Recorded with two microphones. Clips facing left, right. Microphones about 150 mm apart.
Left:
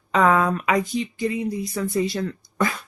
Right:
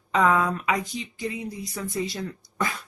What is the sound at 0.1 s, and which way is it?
Speech, 60° left (ahead or behind).